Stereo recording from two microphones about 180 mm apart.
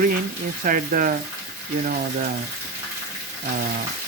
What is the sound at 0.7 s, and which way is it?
Speech, 50° right (ahead or behind).